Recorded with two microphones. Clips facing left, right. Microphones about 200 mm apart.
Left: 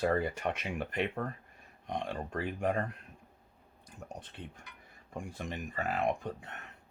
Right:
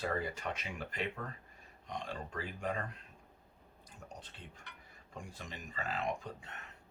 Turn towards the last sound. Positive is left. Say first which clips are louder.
# left 6 dB
turn(degrees=60)  # may be behind; listen again after turning